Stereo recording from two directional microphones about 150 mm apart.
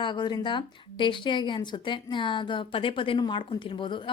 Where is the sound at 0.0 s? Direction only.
30° left (ahead or behind).